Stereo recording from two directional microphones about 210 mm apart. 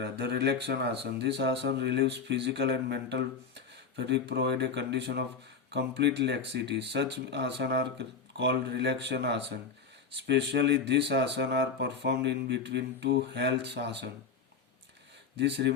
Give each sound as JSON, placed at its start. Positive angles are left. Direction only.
{"t": 0.0, "sound": "speech", "side_deg": -55}
{"t": 15.4, "sound": "speech", "side_deg": -55}